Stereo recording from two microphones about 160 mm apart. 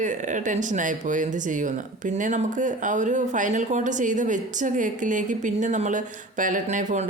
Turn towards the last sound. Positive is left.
turn(degrees=-50)  # may be behind; listen again after turning